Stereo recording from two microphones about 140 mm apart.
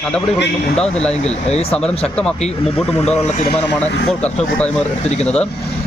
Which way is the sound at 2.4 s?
45° left (ahead or behind).